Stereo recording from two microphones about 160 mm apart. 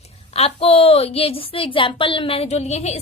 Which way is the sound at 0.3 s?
40° left (ahead or behind).